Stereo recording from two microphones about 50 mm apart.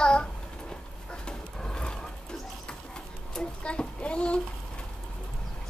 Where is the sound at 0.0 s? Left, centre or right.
Centre.